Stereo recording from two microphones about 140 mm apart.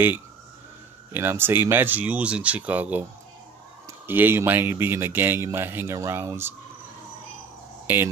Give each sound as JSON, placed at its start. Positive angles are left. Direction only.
{"t": 1.1, "sound": "speech", "side_deg": -15}
{"t": 7.8, "sound": "speech", "side_deg": -15}